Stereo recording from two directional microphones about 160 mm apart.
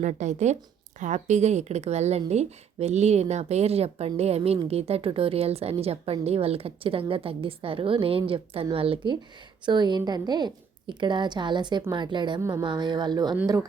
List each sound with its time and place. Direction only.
0.0 s a woman's voice: 50° right (ahead or behind); by 12.4 s 30° right (ahead or behind)
12.4 s a woman's voice: 15° right (ahead or behind)
12.6 s a woman's voice: 30° right (ahead or behind)